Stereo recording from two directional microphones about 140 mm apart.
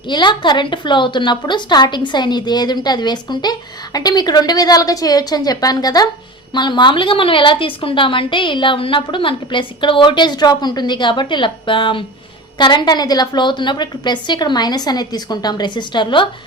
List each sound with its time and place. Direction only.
0.1 s a woman's voice: 35° left (ahead or behind)